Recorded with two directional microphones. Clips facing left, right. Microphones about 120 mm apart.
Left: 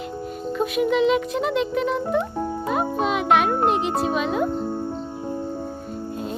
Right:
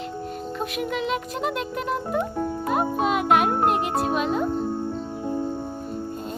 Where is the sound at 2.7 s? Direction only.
Centre (ahead or behind).